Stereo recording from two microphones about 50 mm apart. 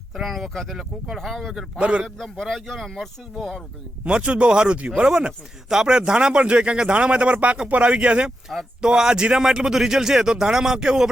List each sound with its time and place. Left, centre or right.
0.1 s speech: centre
1.8 s speech: right
2.0 s speech: centre
4.0 s speech: centre